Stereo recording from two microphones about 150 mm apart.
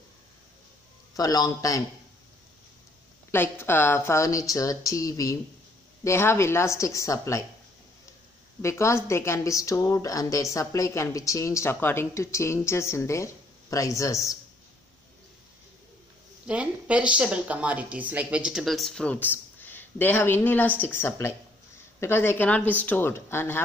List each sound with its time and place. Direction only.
1.1 s speech: 25° left (ahead or behind)
3.3 s speech: 15° left (ahead or behind)
8.6 s speech: 20° left (ahead or behind)
16.4 s speech: 10° right (ahead or behind); by 23.6 s 15° left (ahead or behind)